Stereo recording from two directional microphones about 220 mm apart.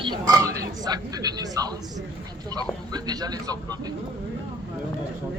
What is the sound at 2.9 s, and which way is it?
Speech, 15° right (ahead or behind).